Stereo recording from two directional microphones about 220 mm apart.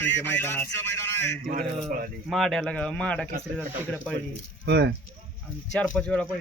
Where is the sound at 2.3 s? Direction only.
Centre (ahead or behind).